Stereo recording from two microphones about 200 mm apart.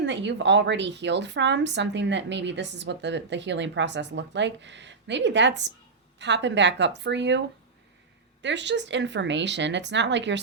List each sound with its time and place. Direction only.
0.0 s a woman's voice: 65° right (ahead or behind)